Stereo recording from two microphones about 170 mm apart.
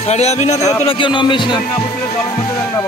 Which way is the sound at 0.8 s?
30° left (ahead or behind).